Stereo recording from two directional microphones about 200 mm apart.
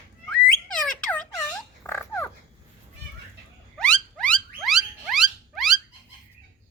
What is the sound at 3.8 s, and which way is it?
Rodents, 5° left (ahead or behind).